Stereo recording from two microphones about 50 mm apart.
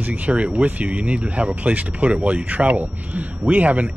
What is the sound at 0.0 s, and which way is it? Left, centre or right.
Speech, right.